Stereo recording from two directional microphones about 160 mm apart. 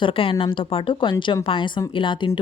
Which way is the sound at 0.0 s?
35° left (ahead or behind).